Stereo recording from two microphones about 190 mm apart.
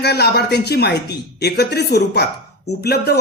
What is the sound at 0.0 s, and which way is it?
Speech, 60° left (ahead or behind).